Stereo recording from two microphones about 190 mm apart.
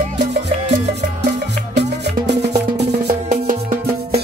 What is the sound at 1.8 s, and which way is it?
Music, 60° right (ahead or behind).